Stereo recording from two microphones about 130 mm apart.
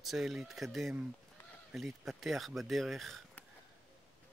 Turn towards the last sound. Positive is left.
turn(degrees=0)  # may be behind; listen again after turning